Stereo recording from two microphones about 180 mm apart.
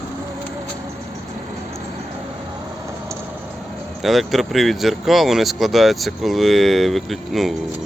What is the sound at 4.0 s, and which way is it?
Speech, centre (ahead or behind).